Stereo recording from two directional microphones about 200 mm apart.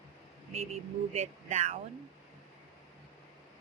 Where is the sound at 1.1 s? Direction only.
35° right (ahead or behind).